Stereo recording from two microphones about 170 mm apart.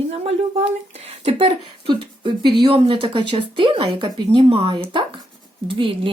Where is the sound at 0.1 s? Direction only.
35° right (ahead or behind).